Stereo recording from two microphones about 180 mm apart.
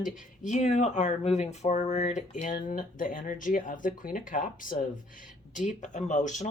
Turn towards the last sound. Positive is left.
turn(degrees=45)  # may be behind; listen again after turning